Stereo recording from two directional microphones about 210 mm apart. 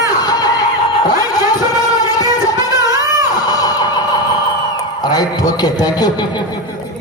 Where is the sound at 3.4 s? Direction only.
20° left (ahead or behind).